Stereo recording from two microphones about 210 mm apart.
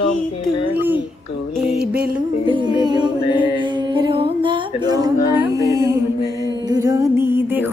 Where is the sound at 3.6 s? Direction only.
20° right (ahead or behind).